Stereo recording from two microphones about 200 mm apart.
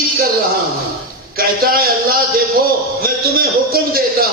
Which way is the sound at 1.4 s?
50° right (ahead or behind).